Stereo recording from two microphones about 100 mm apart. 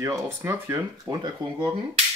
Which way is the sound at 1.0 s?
35° right (ahead or behind).